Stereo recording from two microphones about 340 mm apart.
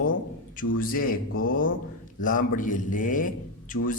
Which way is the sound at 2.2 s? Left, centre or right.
Left.